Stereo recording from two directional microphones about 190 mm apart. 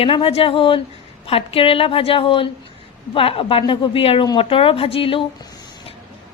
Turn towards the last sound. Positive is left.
turn(degrees=30)  # may be behind; listen again after turning